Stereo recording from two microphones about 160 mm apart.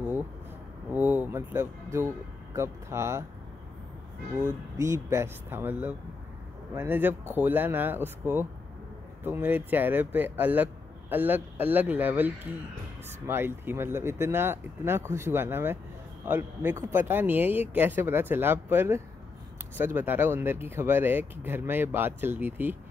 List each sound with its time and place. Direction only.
0.9 s speech: 10° right (ahead or behind)
4.4 s speech: 15° right (ahead or behind)
13.3 s speech: 15° right (ahead or behind)